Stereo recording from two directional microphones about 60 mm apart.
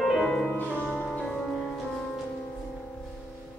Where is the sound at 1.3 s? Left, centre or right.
Centre.